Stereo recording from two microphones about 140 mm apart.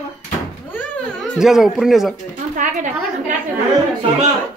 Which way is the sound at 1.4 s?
5° right (ahead or behind).